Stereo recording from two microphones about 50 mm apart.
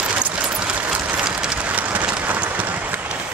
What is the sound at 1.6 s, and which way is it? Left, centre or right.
Vehicle, right.